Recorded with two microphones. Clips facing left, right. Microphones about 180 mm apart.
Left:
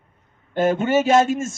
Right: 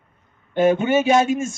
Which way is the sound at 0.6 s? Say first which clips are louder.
Right 2 dB; centre (ahead or behind).